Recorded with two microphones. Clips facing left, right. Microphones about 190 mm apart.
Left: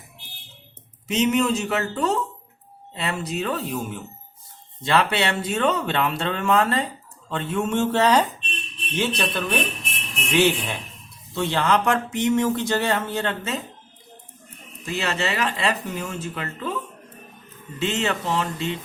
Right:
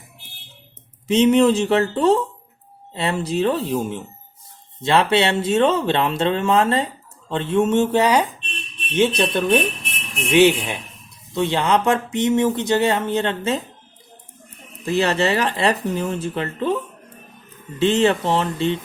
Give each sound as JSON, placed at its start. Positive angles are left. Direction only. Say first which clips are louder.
{"t": 1.0, "sound": "speech", "louder": "right 7 dB", "side_deg": -30}
{"t": 9.0, "sound": "speech", "louder": "right 7 dB", "side_deg": -25}
{"t": 14.8, "sound": "speech", "louder": "right 7 dB", "side_deg": -35}
{"t": 17.7, "sound": "speech", "louder": "right 8 dB", "side_deg": -30}